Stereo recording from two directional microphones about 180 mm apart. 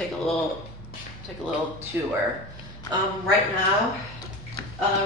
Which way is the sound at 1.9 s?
10° right (ahead or behind).